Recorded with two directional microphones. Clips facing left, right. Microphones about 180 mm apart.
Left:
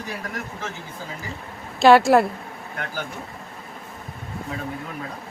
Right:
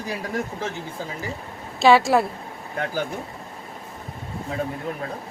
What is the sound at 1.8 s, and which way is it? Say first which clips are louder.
Speech: left 2 dB; centre (ahead or behind).